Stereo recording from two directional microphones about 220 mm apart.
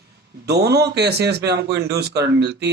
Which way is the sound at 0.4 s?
50° right (ahead or behind).